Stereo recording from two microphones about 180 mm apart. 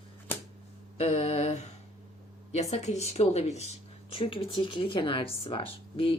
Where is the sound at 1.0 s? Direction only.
35° left (ahead or behind).